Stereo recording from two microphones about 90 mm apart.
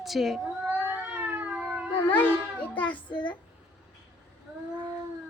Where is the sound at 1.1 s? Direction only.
20° right (ahead or behind).